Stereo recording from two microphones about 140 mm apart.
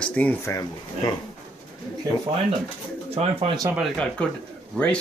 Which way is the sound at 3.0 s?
45° right (ahead or behind).